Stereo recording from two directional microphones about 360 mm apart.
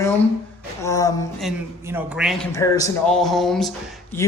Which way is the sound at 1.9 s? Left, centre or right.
Centre.